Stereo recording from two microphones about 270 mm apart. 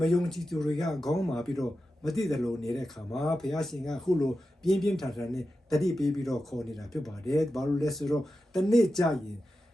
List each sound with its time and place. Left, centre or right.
0.0 s speech: centre